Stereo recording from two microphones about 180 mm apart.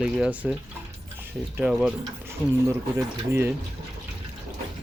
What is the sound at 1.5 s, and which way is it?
Speech, 10° right (ahead or behind).